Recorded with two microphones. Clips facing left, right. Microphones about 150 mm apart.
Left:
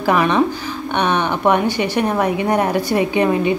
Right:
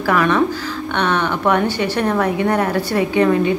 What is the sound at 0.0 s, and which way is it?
A woman's voice, 20° left (ahead or behind).